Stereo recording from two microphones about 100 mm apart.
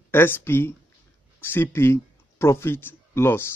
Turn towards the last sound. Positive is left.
turn(degrees=25)  # may be behind; listen again after turning